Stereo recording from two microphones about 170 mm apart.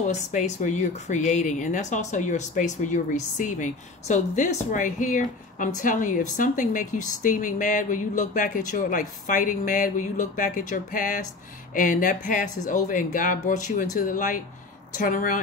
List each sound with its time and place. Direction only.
0.0 s speech: 45° left (ahead or behind)